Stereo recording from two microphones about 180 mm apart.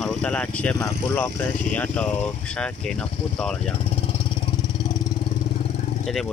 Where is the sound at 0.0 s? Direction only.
5° left (ahead or behind).